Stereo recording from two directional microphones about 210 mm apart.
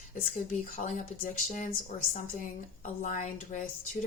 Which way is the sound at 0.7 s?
35° left (ahead or behind).